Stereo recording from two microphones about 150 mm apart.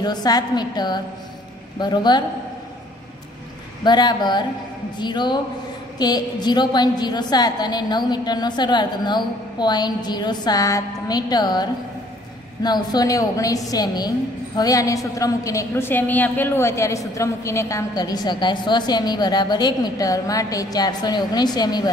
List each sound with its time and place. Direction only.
0.0 s a woman's voice: 25° left (ahead or behind)
3.8 s a woman's voice: 30° left (ahead or behind)